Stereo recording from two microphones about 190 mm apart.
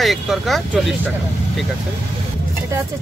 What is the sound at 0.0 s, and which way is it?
A man's voice, centre (ahead or behind).